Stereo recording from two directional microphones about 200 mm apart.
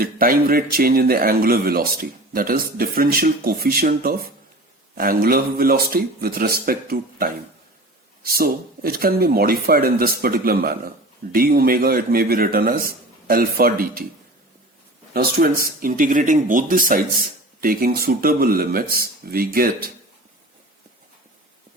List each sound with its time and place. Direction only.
0.0 s speech: 45° right (ahead or behind)
15.1 s speech: 50° right (ahead or behind)